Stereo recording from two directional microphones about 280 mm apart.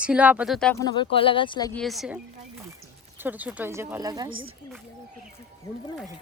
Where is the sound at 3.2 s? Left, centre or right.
Centre.